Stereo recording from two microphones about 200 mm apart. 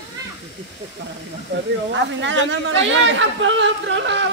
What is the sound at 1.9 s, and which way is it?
Speech, 65° right (ahead or behind).